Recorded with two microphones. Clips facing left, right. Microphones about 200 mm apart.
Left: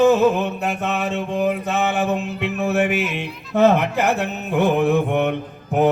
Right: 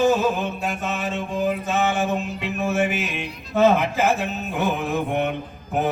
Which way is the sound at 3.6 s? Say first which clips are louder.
Left 2 dB; 70° left (ahead or behind).